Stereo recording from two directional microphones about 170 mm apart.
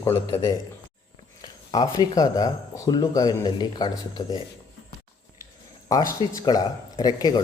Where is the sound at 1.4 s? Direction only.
25° left (ahead or behind).